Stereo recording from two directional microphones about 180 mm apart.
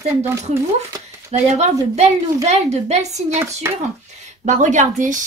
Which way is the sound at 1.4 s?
40° right (ahead or behind).